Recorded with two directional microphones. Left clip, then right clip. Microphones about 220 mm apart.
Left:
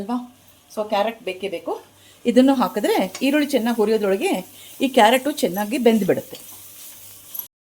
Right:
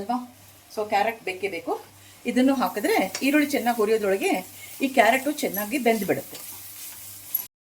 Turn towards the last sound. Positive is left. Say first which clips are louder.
# left 5 dB
turn(degrees=45)  # may be behind; listen again after turning